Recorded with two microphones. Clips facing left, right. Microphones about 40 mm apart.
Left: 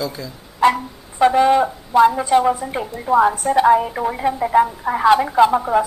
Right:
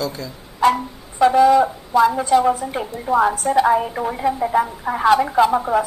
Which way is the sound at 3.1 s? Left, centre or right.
Centre.